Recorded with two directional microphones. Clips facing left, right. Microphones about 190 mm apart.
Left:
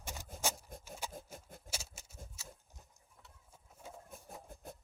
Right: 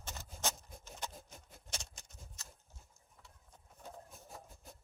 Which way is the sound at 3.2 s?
5° left (ahead or behind).